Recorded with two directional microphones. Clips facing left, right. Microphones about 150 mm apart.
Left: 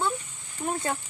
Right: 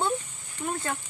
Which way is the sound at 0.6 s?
40° left (ahead or behind).